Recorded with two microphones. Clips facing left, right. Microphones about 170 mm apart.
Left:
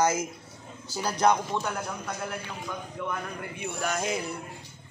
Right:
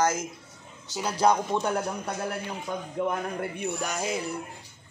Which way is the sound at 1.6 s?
35° right (ahead or behind).